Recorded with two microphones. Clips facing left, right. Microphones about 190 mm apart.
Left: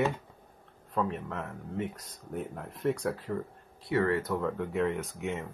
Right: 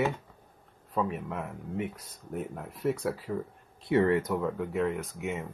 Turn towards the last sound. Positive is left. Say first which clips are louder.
# even
turn(degrees=-5)  # may be behind; listen again after turning